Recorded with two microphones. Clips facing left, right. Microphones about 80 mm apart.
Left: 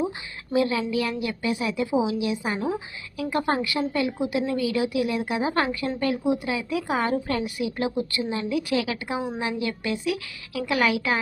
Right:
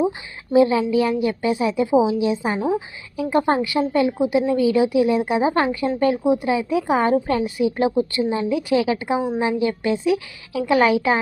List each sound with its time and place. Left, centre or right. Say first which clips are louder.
0.5 s a woman's voice: right 7 dB; right
2.6 s a woman's voice: right 6 dB; centre
3.2 s a woman's voice: right 6 dB; right